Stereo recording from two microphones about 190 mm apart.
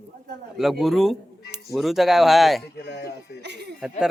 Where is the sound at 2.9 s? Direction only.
60° left (ahead or behind).